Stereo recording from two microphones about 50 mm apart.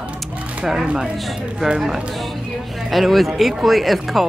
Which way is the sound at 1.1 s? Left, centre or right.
Centre.